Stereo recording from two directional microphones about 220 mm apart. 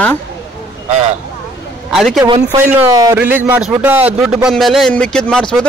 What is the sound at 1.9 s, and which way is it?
Speech, centre (ahead or behind).